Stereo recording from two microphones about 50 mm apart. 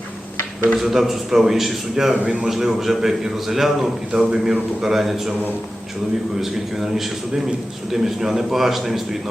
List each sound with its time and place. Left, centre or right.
0.8 s a man's voice: centre
2.2 s a man's voice: centre
6.4 s a man's voice: centre